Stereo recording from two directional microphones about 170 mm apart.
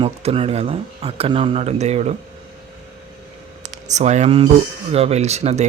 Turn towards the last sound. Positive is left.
turn(degrees=-40)  # may be behind; listen again after turning